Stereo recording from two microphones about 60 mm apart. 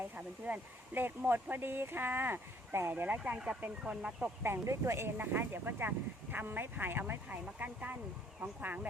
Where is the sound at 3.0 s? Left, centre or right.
Right.